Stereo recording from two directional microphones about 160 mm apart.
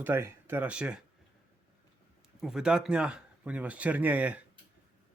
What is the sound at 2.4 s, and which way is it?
Speech, 5° right (ahead or behind).